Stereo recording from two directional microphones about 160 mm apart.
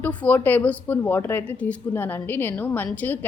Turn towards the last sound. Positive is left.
turn(degrees=10)  # may be behind; listen again after turning